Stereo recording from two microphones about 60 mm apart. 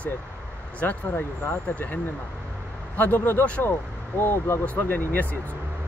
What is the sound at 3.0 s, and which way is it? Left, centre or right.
Speech, left.